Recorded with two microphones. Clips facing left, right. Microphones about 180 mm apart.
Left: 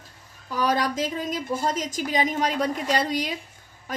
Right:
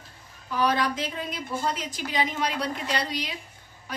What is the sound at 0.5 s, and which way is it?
A woman's voice, 45° left (ahead or behind).